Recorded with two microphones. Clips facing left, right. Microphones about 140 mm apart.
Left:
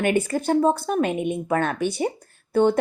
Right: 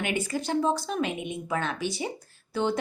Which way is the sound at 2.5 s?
55° left (ahead or behind).